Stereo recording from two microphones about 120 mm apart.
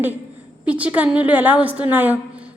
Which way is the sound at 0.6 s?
10° right (ahead or behind).